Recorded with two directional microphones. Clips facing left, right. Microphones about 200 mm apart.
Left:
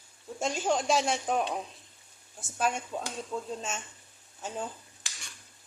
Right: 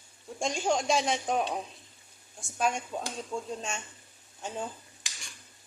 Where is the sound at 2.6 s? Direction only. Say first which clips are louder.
Right 1 dB; centre (ahead or behind).